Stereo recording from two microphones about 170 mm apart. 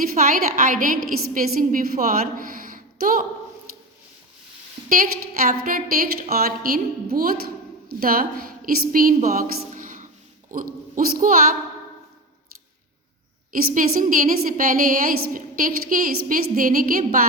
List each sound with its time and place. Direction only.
0.0 s a woman's voice: 55° right (ahead or behind)
2.2 s a sound: 55° right (ahead or behind)
4.9 s a woman's voice: 55° right (ahead or behind)
13.5 s a woman's voice: 55° right (ahead or behind)